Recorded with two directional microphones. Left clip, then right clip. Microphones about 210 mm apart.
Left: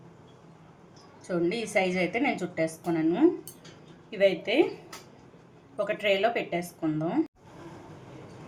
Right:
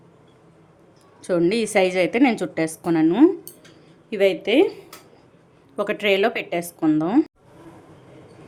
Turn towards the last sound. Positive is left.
turn(degrees=-55)  # may be behind; listen again after turning